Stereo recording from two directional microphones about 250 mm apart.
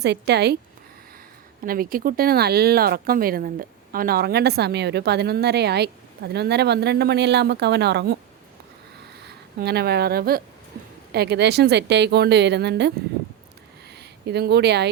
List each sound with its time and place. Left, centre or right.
0.0 s speech: right
1.6 s speech: right
9.2 s speech: right
13.9 s a sound: right